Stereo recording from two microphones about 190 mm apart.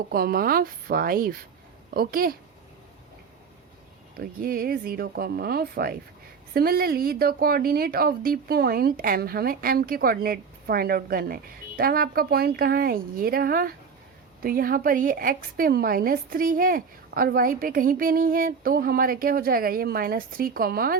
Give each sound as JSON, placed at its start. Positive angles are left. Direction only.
{"t": 0.1, "sound": "speech", "side_deg": -50}
{"t": 4.1, "sound": "speech", "side_deg": -50}